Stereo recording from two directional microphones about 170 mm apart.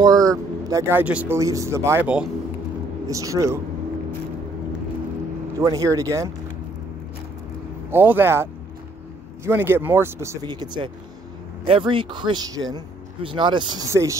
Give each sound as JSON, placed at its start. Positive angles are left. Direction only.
{"t": 0.0, "sound": "speech", "side_deg": -20}
{"t": 5.6, "sound": "speech", "side_deg": -20}
{"t": 7.9, "sound": "speech", "side_deg": -10}